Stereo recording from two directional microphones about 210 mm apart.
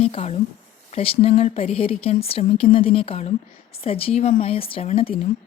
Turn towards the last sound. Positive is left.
turn(degrees=25)  # may be behind; listen again after turning